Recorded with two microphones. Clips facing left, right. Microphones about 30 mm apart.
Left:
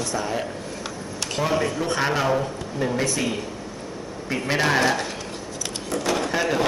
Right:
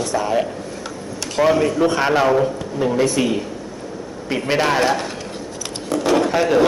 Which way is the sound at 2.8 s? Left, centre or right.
Centre.